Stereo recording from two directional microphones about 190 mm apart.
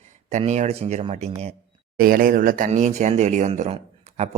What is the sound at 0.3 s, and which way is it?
A man's voice, 35° right (ahead or behind).